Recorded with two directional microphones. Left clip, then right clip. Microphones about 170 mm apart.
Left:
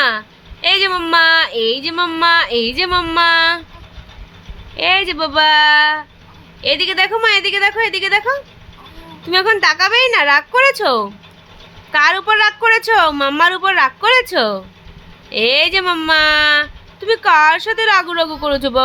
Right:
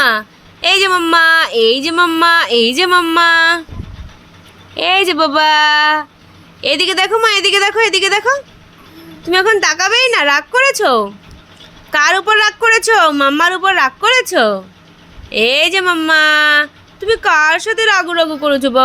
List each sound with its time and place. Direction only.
0.0 s speech: 30° right (ahead or behind)
4.8 s speech: 30° right (ahead or behind); by 18.8 s 15° right (ahead or behind)